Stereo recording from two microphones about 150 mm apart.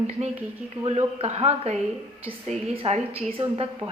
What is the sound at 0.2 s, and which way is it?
A woman's voice, 45° right (ahead or behind).